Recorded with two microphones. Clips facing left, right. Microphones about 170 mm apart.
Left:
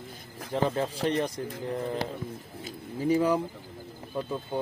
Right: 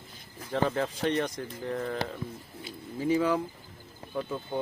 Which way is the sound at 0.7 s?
30° left (ahead or behind).